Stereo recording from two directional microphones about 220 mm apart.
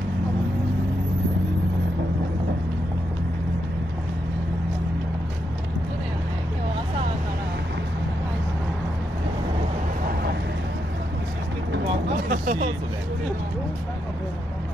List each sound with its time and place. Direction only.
12.3 s vehicle: 35° right (ahead or behind)